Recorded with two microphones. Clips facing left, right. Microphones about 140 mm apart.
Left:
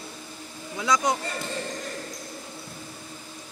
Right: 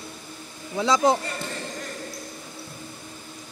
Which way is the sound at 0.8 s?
30° right (ahead or behind).